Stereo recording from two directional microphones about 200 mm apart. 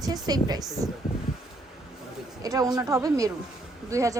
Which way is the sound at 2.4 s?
20° right (ahead or behind).